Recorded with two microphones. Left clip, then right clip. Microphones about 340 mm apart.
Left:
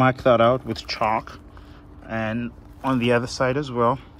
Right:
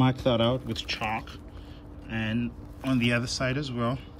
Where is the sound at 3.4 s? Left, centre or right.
Centre.